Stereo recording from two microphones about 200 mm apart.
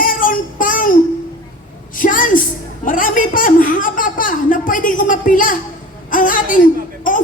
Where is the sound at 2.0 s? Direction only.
40° left (ahead or behind).